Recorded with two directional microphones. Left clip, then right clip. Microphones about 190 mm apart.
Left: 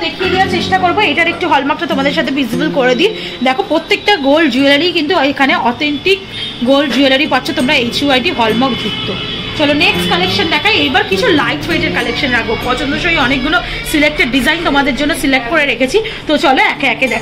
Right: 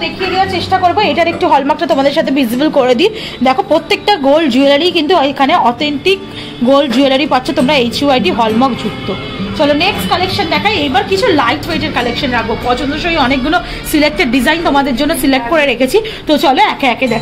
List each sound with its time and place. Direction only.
1.0 s a woman's voice: 50° right (ahead or behind)